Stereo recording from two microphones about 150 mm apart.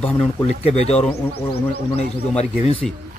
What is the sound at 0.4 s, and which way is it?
Speech, 45° left (ahead or behind).